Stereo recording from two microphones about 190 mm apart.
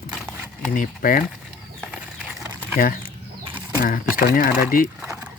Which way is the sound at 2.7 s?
45° left (ahead or behind).